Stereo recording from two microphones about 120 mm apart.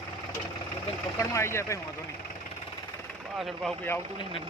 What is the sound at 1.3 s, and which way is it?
Speech, 20° left (ahead or behind).